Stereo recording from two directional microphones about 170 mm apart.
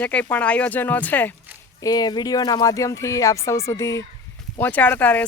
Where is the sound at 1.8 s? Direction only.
25° left (ahead or behind).